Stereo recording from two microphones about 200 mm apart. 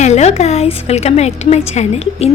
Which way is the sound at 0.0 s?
35° left (ahead or behind).